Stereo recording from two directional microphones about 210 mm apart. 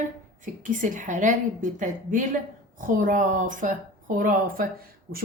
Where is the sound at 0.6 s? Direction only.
40° right (ahead or behind).